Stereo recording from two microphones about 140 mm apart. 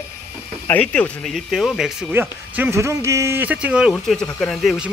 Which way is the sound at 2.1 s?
15° right (ahead or behind).